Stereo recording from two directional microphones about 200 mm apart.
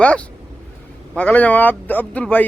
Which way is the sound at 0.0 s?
5° left (ahead or behind).